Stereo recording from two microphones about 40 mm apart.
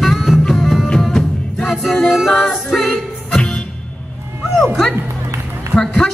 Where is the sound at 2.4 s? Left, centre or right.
Centre.